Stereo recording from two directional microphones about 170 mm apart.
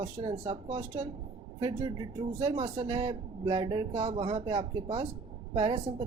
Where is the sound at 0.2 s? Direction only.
30° right (ahead or behind).